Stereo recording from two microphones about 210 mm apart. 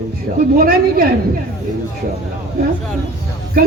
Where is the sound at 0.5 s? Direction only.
45° right (ahead or behind).